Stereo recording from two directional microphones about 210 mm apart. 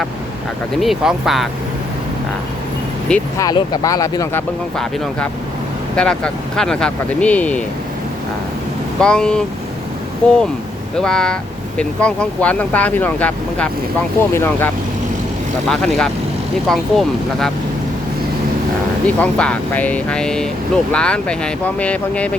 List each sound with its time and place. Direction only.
0.8 s speech: centre (ahead or behind)
3.3 s speech: 20° left (ahead or behind)
9.0 s speech: 5° left (ahead or behind)
15.7 s speech: centre (ahead or behind)
19.0 s speech: 5° left (ahead or behind)